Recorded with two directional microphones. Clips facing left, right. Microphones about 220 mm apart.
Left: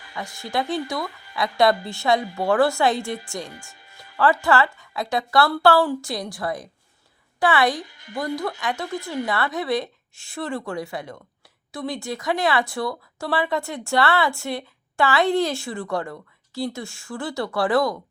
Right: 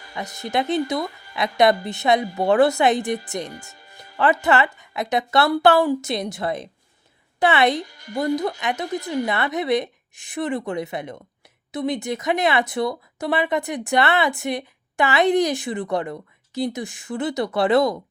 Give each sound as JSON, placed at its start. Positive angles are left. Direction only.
{"t": 0.1, "sound": "speech", "side_deg": -20}
{"t": 3.5, "sound": "music", "side_deg": -40}
{"t": 4.2, "sound": "a woman's voice", "side_deg": -20}
{"t": 7.8, "sound": "speech", "side_deg": -40}
{"t": 8.4, "sound": "speech", "side_deg": -20}